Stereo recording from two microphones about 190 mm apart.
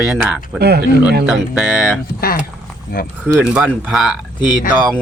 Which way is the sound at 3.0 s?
50° left (ahead or behind).